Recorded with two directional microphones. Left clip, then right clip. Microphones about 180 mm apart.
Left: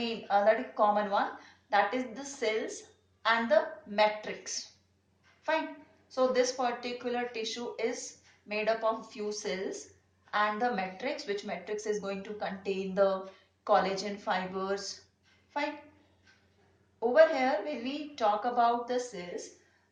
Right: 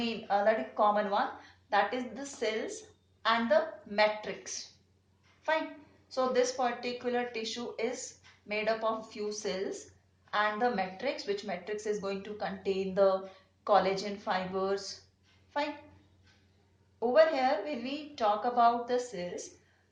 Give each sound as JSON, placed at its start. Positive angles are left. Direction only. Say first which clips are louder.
{"t": 0.0, "sound": "speech", "louder": "left 2 dB", "side_deg": -45}
{"t": 17.1, "sound": "speech", "louder": "left 1 dB", "side_deg": -45}